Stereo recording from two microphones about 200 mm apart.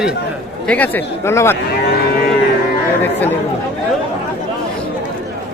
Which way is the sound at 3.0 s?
10° left (ahead or behind).